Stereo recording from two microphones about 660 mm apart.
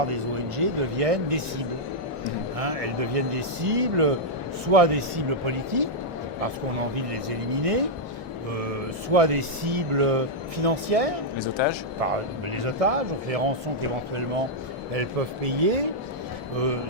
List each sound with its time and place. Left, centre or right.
0.0 s speech: right
6.9 s speech: right
9.0 s speech: right
11.3 s speech: left
11.9 s speech: right
14.9 s speech: right